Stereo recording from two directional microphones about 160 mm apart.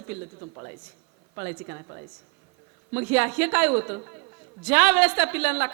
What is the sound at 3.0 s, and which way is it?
A woman's voice, 10° right (ahead or behind).